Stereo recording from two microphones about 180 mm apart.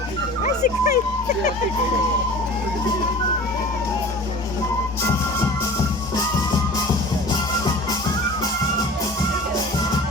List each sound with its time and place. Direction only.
0.4 s music: 40° left (ahead or behind)